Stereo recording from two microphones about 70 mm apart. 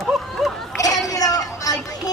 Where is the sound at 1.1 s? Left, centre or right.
Left.